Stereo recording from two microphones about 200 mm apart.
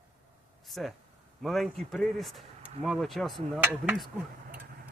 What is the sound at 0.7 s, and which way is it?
Speech, centre (ahead or behind).